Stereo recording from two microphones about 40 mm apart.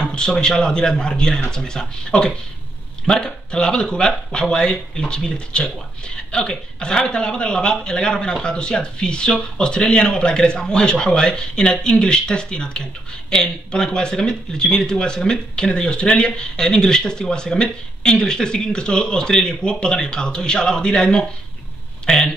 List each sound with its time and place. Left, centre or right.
0.0 s speech: left